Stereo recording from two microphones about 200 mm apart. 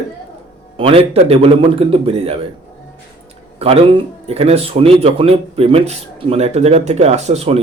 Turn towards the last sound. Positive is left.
turn(degrees=-30)  # may be behind; listen again after turning